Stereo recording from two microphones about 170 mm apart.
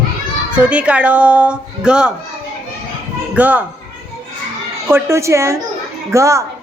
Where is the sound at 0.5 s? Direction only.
5° right (ahead or behind).